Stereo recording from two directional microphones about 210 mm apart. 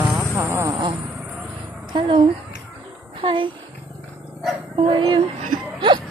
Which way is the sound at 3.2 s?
25° right (ahead or behind).